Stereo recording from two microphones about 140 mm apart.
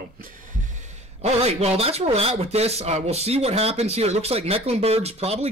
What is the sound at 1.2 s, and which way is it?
A man's voice, 50° right (ahead or behind).